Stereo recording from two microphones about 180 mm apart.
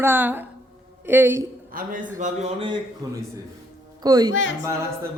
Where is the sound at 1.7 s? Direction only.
50° right (ahead or behind).